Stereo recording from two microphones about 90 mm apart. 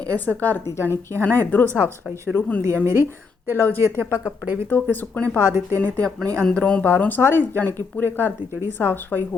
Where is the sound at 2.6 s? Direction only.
30° right (ahead or behind).